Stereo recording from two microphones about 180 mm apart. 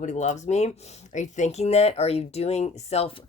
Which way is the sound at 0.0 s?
40° left (ahead or behind).